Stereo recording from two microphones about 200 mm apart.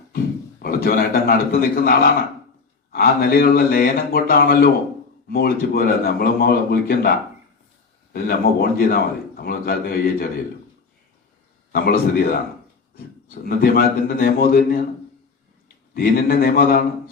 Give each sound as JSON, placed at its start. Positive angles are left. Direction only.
{"t": 0.6, "sound": "a man's voice", "side_deg": 45}
{"t": 8.1, "sound": "a man's voice", "side_deg": 50}
{"t": 11.7, "sound": "a man's voice", "side_deg": 45}
{"t": 16.0, "sound": "a man's voice", "side_deg": 50}